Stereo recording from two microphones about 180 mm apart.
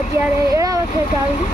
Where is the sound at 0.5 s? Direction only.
20° right (ahead or behind).